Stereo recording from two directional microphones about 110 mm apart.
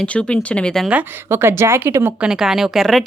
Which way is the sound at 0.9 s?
20° right (ahead or behind).